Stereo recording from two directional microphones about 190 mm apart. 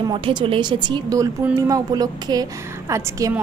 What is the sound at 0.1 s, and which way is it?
A woman's voice, 25° right (ahead or behind).